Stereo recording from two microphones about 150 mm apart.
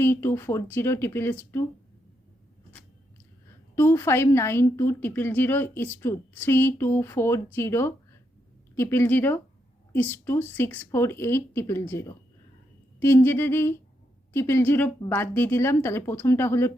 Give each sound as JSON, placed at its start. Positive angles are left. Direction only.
{"t": 0.0, "sound": "a woman's voice", "side_deg": 15}
{"t": 3.8, "sound": "a woman's voice", "side_deg": 15}